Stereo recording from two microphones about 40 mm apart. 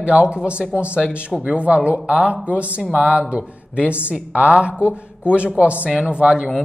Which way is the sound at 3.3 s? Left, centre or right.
Right.